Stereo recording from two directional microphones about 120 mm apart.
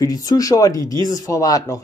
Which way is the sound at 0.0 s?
30° left (ahead or behind).